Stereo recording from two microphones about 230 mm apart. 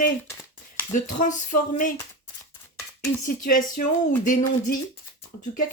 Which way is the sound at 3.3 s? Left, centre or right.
Left.